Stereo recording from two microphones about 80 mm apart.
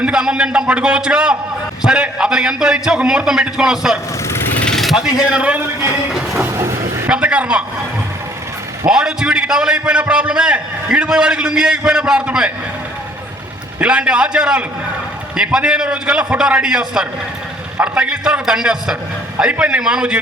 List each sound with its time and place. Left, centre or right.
0.0 s a man's voice: centre
4.6 s vehicle: centre
5.3 s a man's voice: centre
6.1 s train: centre
6.5 s vehicle: right
7.1 s a man's voice: centre
8.9 s a man's voice: centre
13.7 s a man's voice: centre